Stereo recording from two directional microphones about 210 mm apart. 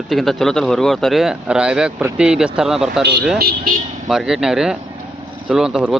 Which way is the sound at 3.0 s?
55° right (ahead or behind).